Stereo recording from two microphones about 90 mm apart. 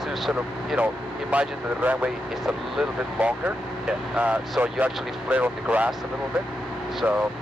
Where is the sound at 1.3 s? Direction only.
15° right (ahead or behind).